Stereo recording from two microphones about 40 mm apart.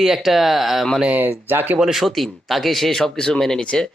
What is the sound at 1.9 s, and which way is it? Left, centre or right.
Speech, centre.